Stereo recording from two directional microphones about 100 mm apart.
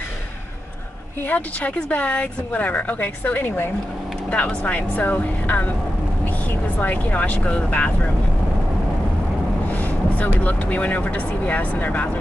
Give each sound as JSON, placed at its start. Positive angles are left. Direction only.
{"t": 1.2, "sound": "a woman's voice", "side_deg": 15}
{"t": 6.8, "sound": "a woman's voice", "side_deg": 15}
{"t": 9.7, "sound": "vehicle", "side_deg": 15}
{"t": 10.4, "sound": "a woman's voice", "side_deg": 15}